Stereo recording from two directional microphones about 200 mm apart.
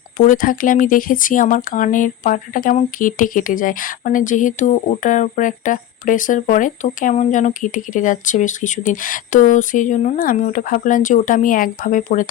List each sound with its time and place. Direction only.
0.2 s speech: 40° left (ahead or behind)